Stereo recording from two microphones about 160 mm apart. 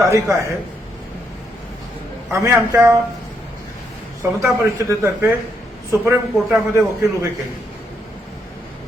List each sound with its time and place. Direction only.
0.1 s speech: 20° right (ahead or behind)
2.4 s a man's voice: 15° right (ahead or behind)
4.2 s a man's voice: 20° right (ahead or behind)